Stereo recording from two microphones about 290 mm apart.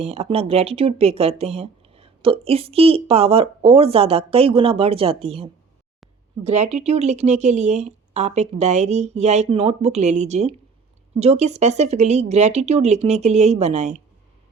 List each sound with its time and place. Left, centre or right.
0.0 s speech: right